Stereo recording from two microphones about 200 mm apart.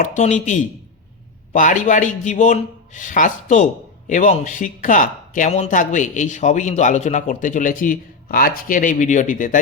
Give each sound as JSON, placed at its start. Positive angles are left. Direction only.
{"t": 0.0, "sound": "a man's voice", "side_deg": 40}